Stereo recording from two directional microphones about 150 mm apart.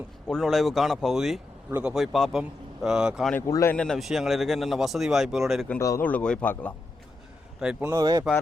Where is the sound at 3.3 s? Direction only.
20° left (ahead or behind).